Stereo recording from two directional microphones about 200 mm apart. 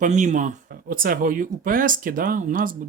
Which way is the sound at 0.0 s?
40° right (ahead or behind).